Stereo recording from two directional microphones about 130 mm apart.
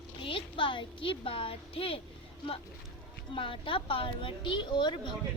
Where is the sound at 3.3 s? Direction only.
45° left (ahead or behind).